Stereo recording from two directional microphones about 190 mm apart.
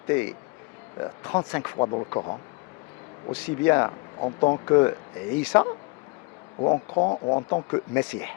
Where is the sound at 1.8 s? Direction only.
30° left (ahead or behind).